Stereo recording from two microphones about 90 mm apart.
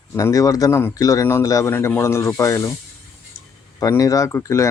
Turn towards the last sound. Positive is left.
turn(degrees=35)  # may be behind; listen again after turning